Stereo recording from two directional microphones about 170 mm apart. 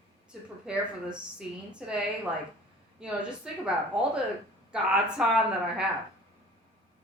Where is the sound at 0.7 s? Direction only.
5° right (ahead or behind).